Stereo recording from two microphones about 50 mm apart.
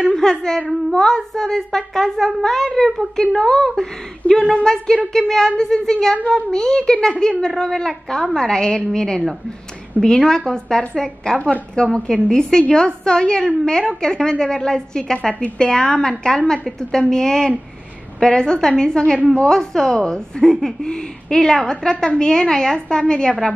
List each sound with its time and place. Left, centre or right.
0.1 s a woman's voice: centre